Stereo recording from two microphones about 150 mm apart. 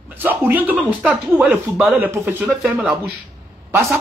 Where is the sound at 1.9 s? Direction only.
15° right (ahead or behind).